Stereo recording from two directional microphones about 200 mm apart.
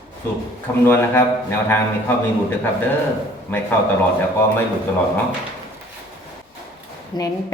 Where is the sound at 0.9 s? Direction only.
10° left (ahead or behind).